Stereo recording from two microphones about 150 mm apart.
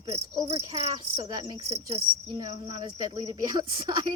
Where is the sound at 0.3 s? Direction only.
25° right (ahead or behind).